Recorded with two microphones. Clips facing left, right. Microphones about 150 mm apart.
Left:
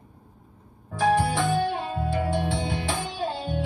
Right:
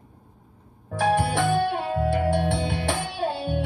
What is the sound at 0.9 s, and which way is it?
Music, 65° right (ahead or behind).